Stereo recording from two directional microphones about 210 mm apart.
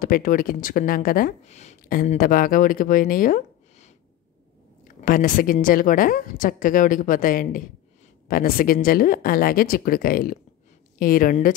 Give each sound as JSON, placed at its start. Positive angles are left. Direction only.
{"t": 0.0, "sound": "speech", "side_deg": 40}
{"t": 5.0, "sound": "speech", "side_deg": 40}